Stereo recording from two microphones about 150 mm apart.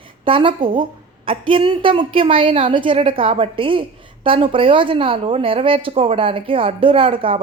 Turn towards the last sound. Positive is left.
turn(degrees=-35)  # may be behind; listen again after turning